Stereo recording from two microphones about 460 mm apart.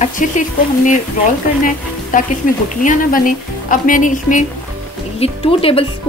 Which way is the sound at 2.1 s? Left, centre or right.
Centre.